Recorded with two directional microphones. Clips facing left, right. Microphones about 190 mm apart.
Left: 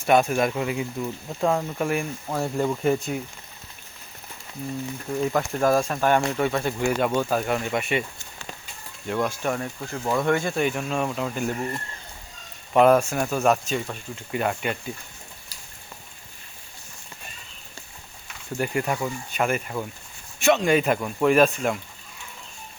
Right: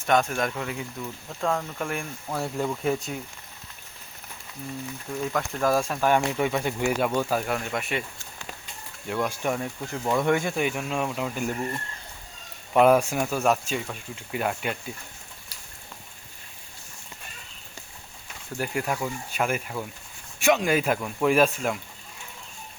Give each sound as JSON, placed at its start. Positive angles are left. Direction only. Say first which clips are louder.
{"t": 0.0, "sound": "speech", "louder": "left 4 dB", "side_deg": 10}
{"t": 5.3, "sound": "speech", "louder": "left 2 dB", "side_deg": 10}
{"t": 9.0, "sound": "speech", "louder": "left 2 dB", "side_deg": -10}
{"t": 18.5, "sound": "speech", "louder": "left 3 dB", "side_deg": 0}